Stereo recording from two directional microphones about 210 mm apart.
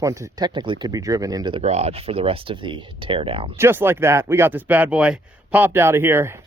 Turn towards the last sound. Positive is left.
turn(degrees=-10)  # may be behind; listen again after turning